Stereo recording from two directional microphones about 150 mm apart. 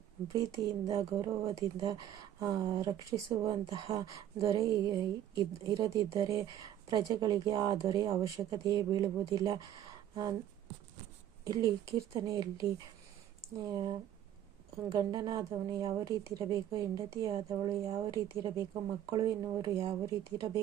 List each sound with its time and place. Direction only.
0.3 s speech: 25° right (ahead or behind)
11.4 s speech: 25° right (ahead or behind)
13.7 s speech: 30° right (ahead or behind)
14.9 s speech: 25° right (ahead or behind)